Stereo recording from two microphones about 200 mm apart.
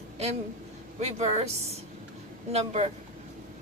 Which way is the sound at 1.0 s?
35° right (ahead or behind).